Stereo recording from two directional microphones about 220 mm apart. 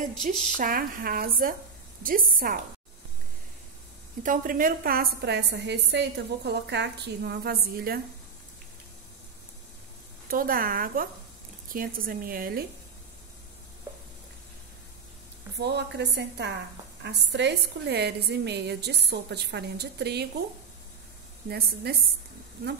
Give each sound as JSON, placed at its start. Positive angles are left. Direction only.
{"t": 0.2, "sound": "speech", "side_deg": 0}
{"t": 0.6, "sound": "speech", "side_deg": -40}
{"t": 4.2, "sound": "a woman's voice", "side_deg": -40}
{"t": 10.3, "sound": "speech", "side_deg": -40}
{"t": 15.5, "sound": "a woman's voice", "side_deg": -50}
{"t": 21.5, "sound": "a woman's voice", "side_deg": -45}